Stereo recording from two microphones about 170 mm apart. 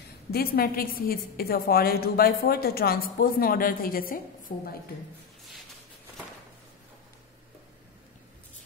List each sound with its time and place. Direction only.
0.3 s a woman's voice: 60° left (ahead or behind)